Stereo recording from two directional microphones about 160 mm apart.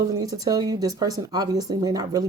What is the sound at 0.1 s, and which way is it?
A woman's voice, 25° right (ahead or behind).